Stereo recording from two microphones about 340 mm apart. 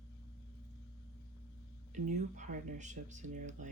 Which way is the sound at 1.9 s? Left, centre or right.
Right.